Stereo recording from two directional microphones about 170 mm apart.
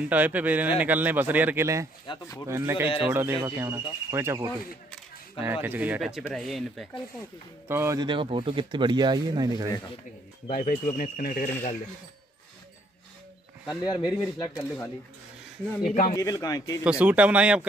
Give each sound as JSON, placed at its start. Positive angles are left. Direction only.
{"t": 0.1, "sound": "speech", "side_deg": -10}
{"t": 2.0, "sound": "speech", "side_deg": 20}
{"t": 2.4, "sound": "speech", "side_deg": -15}
{"t": 7.6, "sound": "speech", "side_deg": -15}
{"t": 8.0, "sound": "speech", "side_deg": -30}
{"t": 10.5, "sound": "speech", "side_deg": 50}
{"t": 13.7, "sound": "speech", "side_deg": 25}
{"t": 15.9, "sound": "speech", "side_deg": 45}
{"t": 16.2, "sound": "speech", "side_deg": 20}
{"t": 17.0, "sound": "speech", "side_deg": -10}